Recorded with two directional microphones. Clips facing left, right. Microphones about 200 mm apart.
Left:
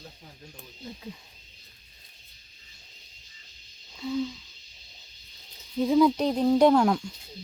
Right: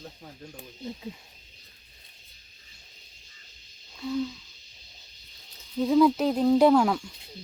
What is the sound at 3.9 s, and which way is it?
Speech, 5° left (ahead or behind).